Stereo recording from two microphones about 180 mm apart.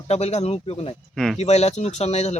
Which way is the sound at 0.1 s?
35° left (ahead or behind).